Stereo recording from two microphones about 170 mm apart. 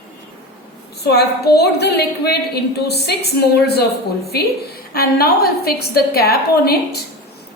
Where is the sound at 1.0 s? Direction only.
70° left (ahead or behind).